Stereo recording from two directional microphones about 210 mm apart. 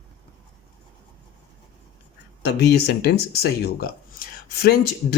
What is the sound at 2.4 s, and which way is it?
Speech, 50° left (ahead or behind).